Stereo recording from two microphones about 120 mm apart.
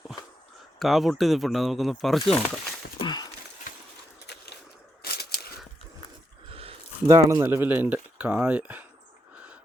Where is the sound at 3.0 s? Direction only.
40° left (ahead or behind).